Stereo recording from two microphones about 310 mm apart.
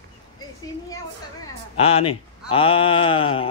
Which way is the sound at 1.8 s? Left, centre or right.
Centre.